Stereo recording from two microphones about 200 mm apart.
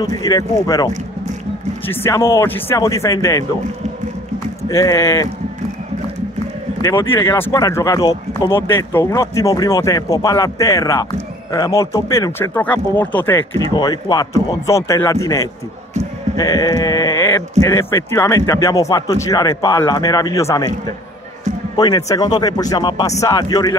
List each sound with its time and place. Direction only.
0.0 s speech: 20° left (ahead or behind)
4.6 s speech: 15° left (ahead or behind)
6.8 s speech: 15° left (ahead or behind)
21.7 s speech: 20° left (ahead or behind)